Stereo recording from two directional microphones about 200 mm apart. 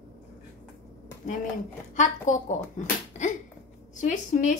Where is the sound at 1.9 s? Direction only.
40° left (ahead or behind).